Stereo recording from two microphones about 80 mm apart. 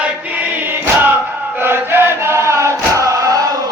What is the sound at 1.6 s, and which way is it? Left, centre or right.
Chant, right.